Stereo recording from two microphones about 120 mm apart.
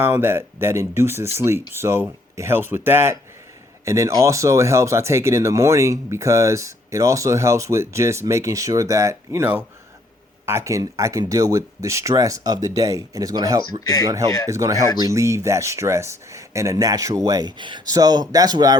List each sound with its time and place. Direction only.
0.0 s speech: 20° right (ahead or behind)